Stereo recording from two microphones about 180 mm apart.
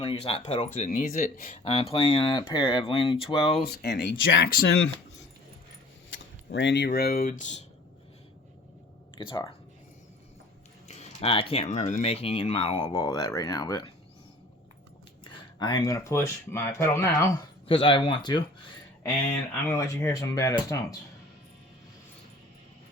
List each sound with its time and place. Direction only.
0.0 s speech: 30° left (ahead or behind); by 1.6 s 50° left (ahead or behind)
1.6 s speech: 35° left (ahead or behind)
3.7 s speech: 65° left (ahead or behind)
4.4 s speech: 60° left (ahead or behind)
6.1 s speech: 90° left; by 7.6 s 45° left (ahead or behind)
9.1 s speech: 25° left (ahead or behind)
10.8 s speech: 35° left (ahead or behind)
12.7 s speech: 20° left (ahead or behind)
15.2 s speech: 25° left (ahead or behind)
17.7 s speech: 30° left (ahead or behind)